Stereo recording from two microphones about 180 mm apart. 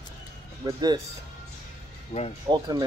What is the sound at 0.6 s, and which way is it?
Speech, 20° right (ahead or behind).